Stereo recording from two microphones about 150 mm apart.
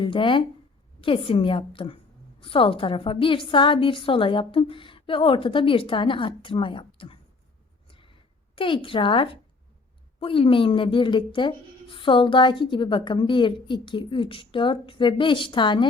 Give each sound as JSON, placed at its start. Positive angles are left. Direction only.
{"t": 0.0, "sound": "speech", "side_deg": 35}
{"t": 7.9, "sound": "a sound", "side_deg": 35}
{"t": 8.5, "sound": "speech", "side_deg": 35}